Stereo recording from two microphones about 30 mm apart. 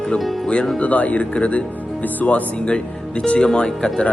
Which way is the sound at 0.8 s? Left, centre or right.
Left.